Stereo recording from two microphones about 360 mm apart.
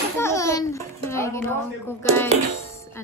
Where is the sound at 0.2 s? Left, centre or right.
Centre.